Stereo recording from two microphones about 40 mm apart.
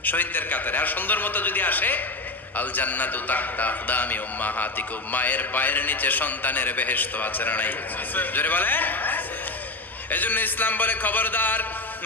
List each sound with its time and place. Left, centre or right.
0.0 s a man's voice: left